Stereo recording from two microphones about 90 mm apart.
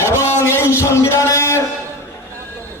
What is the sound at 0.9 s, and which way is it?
Speech, 30° left (ahead or behind).